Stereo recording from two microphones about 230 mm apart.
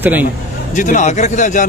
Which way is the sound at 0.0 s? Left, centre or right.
Centre.